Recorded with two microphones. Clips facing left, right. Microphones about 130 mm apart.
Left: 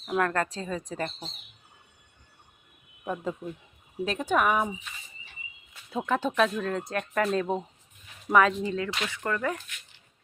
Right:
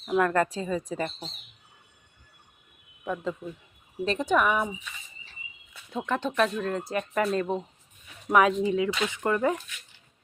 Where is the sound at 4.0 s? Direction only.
5° left (ahead or behind).